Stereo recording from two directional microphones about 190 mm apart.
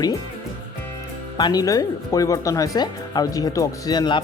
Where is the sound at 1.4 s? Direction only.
20° left (ahead or behind).